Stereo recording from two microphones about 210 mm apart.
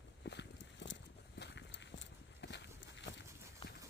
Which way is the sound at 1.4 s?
55° left (ahead or behind).